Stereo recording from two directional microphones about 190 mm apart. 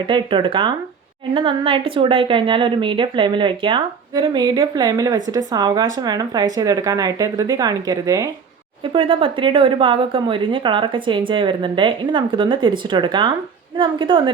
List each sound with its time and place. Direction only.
0.1 s a woman's voice: 25° right (ahead or behind)